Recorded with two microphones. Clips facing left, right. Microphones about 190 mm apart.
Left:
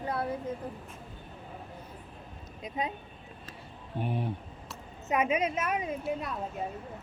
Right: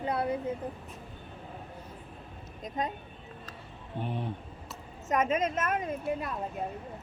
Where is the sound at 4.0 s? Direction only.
10° left (ahead or behind).